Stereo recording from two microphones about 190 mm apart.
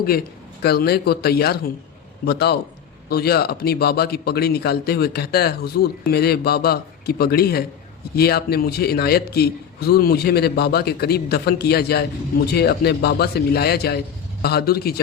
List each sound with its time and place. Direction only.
0.6 s a man's voice: 55° left (ahead or behind)